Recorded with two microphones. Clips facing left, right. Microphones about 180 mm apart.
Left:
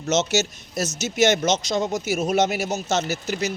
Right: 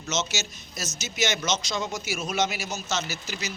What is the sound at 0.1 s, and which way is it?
Speech, 65° left (ahead or behind).